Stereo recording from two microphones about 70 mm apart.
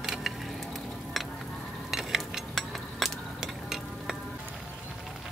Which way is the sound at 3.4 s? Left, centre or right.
Centre.